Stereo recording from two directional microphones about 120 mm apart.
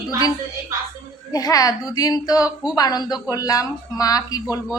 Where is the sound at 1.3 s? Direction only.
30° left (ahead or behind).